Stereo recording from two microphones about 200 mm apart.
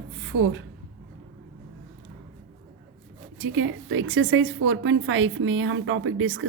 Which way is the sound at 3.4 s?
80° right.